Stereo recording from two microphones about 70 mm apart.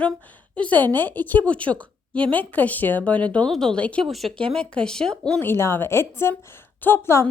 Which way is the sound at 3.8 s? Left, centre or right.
Centre.